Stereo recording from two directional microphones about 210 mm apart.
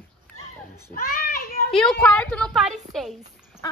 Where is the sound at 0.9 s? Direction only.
45° left (ahead or behind).